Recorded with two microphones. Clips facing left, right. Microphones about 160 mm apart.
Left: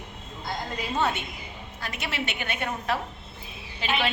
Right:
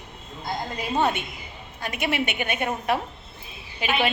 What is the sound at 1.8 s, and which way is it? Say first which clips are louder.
A woman's voice: right 7 dB; 15° right (ahead or behind).